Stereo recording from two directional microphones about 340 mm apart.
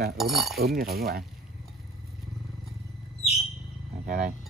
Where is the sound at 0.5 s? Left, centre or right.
Right.